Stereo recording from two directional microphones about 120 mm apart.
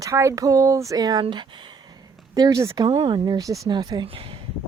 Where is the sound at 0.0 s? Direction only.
25° right (ahead or behind); by 1.5 s 40° right (ahead or behind).